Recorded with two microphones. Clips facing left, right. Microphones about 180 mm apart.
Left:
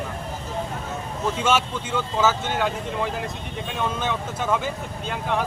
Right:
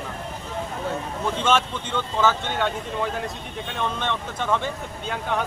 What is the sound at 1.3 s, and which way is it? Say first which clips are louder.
Speech: right 1 dB; 10° left (ahead or behind).